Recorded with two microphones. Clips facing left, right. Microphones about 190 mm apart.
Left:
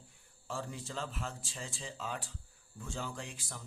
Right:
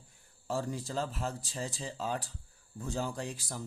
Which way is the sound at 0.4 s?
40° right (ahead or behind).